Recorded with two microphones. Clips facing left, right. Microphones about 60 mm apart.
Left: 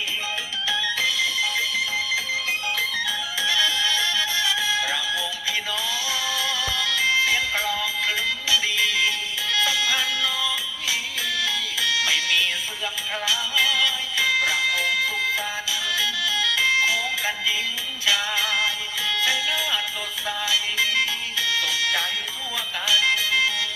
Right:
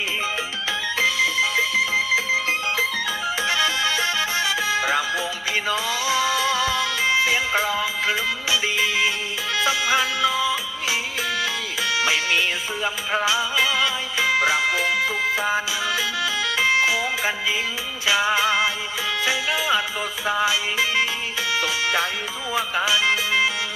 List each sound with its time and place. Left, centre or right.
0.7 s music: right
3.0 s music: right